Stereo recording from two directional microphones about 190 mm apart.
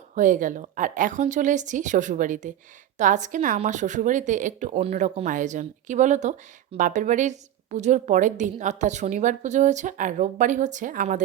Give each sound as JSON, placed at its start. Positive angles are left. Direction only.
{"t": 0.1, "sound": "a woman's voice", "side_deg": -40}